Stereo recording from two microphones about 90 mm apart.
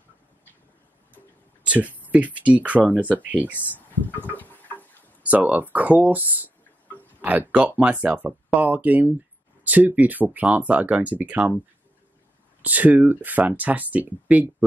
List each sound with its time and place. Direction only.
1.7 s speech: 20° right (ahead or behind)
3.5 s a sound: 20° left (ahead or behind)
5.2 s speech: 15° right (ahead or behind)
12.6 s speech: 20° right (ahead or behind)